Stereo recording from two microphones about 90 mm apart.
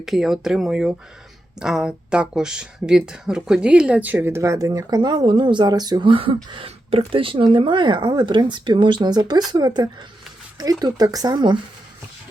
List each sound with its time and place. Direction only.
0.0 s speech: 5° right (ahead or behind); by 4.3 s 20° right (ahead or behind)
4.3 s speech: 35° right (ahead or behind); by 6.1 s 50° right (ahead or behind)
6.1 s speech: 75° right (ahead or behind); by 11.5 s 45° right (ahead or behind)